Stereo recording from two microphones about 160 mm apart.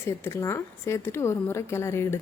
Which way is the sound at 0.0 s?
15° left (ahead or behind).